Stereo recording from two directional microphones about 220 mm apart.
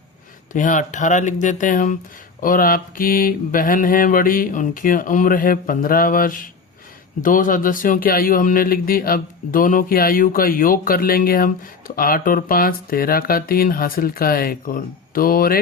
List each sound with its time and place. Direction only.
0.5 s speech: 35° left (ahead or behind)